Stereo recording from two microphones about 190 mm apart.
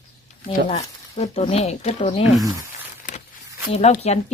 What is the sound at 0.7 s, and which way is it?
Speech, 35° left (ahead or behind).